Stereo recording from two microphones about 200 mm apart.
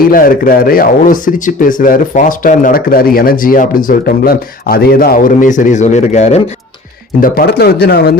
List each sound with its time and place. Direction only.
0.1 s speech: 45° left (ahead or behind)
7.2 s speech: 50° left (ahead or behind)